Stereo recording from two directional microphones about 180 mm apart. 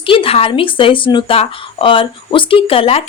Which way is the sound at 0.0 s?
30° left (ahead or behind).